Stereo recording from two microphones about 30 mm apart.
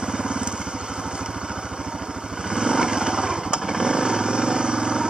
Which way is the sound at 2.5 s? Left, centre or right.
Right.